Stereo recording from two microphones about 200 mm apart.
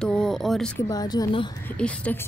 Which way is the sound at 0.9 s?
20° left (ahead or behind).